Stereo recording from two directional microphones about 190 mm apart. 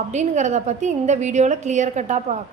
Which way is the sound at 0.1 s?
40° right (ahead or behind).